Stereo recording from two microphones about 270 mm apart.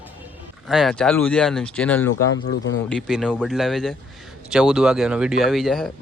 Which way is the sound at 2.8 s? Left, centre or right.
Centre.